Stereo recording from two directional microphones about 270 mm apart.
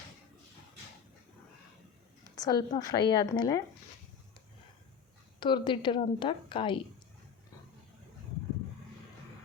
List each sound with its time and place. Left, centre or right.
2.3 s a woman's voice: centre
5.4 s a woman's voice: centre